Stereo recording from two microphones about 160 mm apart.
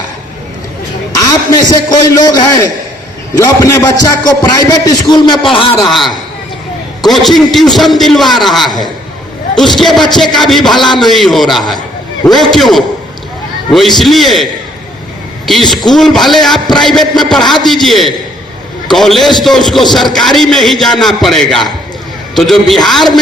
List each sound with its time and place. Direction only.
1.1 s a man's voice: 25° left (ahead or behind)
7.1 s a man's voice: centre (ahead or behind)
15.4 s a man's voice: centre (ahead or behind)